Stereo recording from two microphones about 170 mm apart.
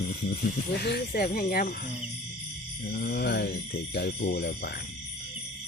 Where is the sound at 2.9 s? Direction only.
75° left (ahead or behind).